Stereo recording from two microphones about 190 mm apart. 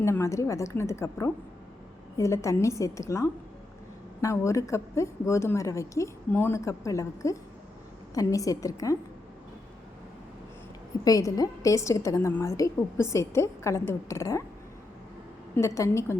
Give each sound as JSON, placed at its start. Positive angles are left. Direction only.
{"t": 0.0, "sound": "a woman's voice", "side_deg": 15}
{"t": 11.0, "sound": "a woman's voice", "side_deg": 20}
{"t": 15.5, "sound": "a woman's voice", "side_deg": 15}